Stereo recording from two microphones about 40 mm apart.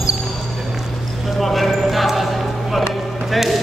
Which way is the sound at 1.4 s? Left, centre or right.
Centre.